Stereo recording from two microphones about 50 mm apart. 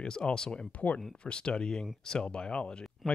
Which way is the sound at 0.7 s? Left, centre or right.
Left.